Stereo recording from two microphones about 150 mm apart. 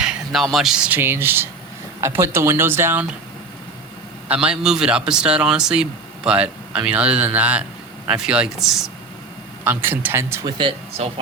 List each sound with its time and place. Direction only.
0.0 s speech: 5° right (ahead or behind)
4.3 s speech: 5° right (ahead or behind)
9.6 s speech: 15° right (ahead or behind)
10.6 s speech: 40° right (ahead or behind)